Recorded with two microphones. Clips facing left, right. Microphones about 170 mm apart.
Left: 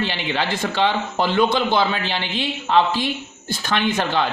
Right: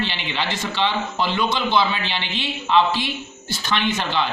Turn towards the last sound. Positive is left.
turn(degrees=50)  # may be behind; listen again after turning